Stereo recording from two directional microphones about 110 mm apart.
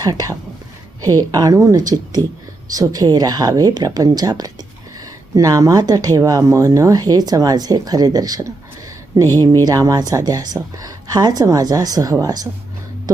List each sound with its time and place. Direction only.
0.0 s speech: 35° right (ahead or behind)